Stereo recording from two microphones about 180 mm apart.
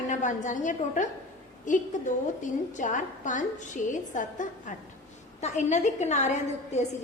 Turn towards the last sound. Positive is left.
turn(degrees=40)  # may be behind; listen again after turning